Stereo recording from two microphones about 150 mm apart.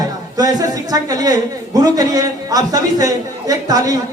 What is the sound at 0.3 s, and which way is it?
A man's voice, 25° right (ahead or behind).